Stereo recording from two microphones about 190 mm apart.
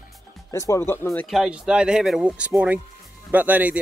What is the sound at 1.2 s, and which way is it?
A man's voice, centre (ahead or behind).